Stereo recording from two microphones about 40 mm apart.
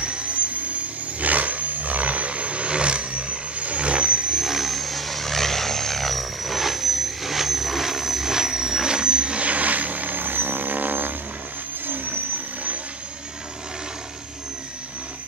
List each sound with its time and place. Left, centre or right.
0.0 s jet engine: right
1.2 s vehicle: right
4.5 s vehicle: centre; by 12.2 s right